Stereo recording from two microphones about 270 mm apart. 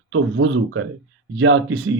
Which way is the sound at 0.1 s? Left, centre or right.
Right.